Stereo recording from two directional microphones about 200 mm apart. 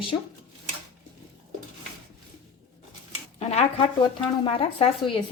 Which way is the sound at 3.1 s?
30° left (ahead or behind).